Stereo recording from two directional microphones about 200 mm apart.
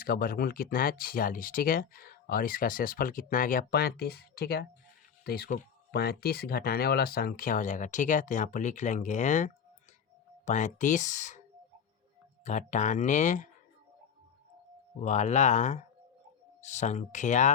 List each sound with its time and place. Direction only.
0.0 s speech: 45° left (ahead or behind)
12.5 s speech: 35° left (ahead or behind)
15.0 s speech: 35° left (ahead or behind)